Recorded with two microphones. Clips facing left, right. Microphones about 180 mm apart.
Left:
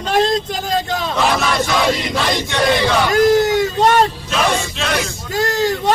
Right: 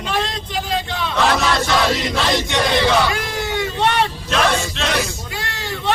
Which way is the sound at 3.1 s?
40° left (ahead or behind).